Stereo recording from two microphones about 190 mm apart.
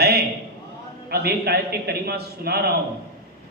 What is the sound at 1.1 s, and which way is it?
A man's voice, 55° right (ahead or behind).